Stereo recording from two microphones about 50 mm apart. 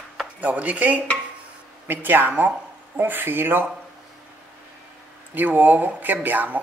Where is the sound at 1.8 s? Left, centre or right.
Right.